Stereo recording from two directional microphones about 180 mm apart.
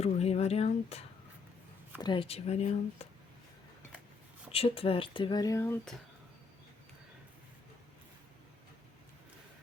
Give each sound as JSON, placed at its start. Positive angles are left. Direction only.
{"t": 0.0, "sound": "a sound", "side_deg": 35}
{"t": 2.0, "sound": "speech", "side_deg": 25}
{"t": 4.5, "sound": "speech", "side_deg": 30}